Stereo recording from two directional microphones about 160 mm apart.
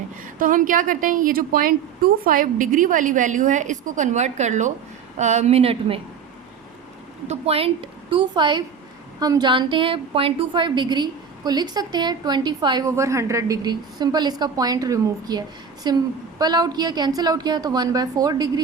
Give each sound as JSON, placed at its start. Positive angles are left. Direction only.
{"t": 0.3, "sound": "a woman's voice", "side_deg": -60}
{"t": 7.3, "sound": "a woman's voice", "side_deg": -40}